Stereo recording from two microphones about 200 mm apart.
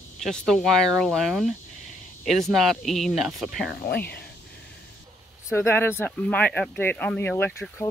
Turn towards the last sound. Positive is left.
turn(degrees=10)  # may be behind; listen again after turning